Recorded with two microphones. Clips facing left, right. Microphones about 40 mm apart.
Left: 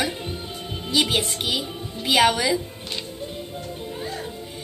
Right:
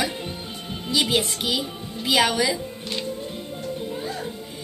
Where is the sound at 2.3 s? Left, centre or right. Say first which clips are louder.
Even; centre.